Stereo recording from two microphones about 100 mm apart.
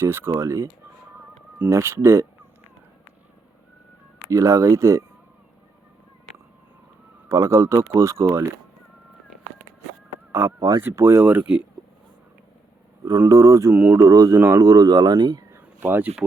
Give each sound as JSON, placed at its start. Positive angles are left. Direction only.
{"t": 0.0, "sound": "speech", "side_deg": -25}
{"t": 1.7, "sound": "speech", "side_deg": -25}
{"t": 4.3, "sound": "speech", "side_deg": -30}
{"t": 7.3, "sound": "speech", "side_deg": -30}
{"t": 10.6, "sound": "speech", "side_deg": -35}
{"t": 13.1, "sound": "speech", "side_deg": -35}
{"t": 15.5, "sound": "a sound", "side_deg": -20}